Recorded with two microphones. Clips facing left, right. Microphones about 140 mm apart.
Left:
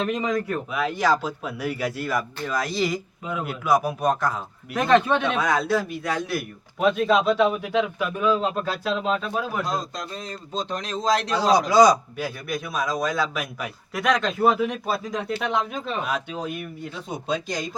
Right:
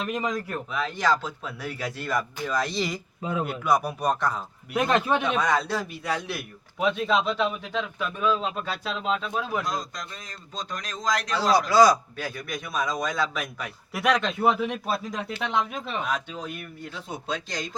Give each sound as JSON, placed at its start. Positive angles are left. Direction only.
{"t": 0.0, "sound": "speech", "side_deg": -5}
{"t": 0.7, "sound": "speech", "side_deg": 10}
{"t": 9.6, "sound": "a man's voice", "side_deg": 30}
{"t": 11.7, "sound": "speech", "side_deg": 15}
{"t": 13.9, "sound": "speech", "side_deg": -5}